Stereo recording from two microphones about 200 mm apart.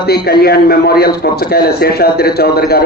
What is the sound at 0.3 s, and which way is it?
A man's voice, 50° left (ahead or behind).